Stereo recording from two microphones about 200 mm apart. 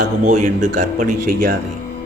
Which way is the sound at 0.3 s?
40° right (ahead or behind).